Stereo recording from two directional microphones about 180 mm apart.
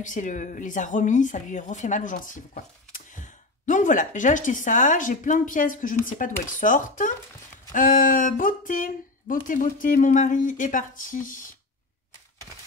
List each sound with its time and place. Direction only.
0.0 s speech: 45° left (ahead or behind)